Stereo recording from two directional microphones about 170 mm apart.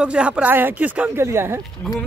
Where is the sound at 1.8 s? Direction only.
Centre (ahead or behind).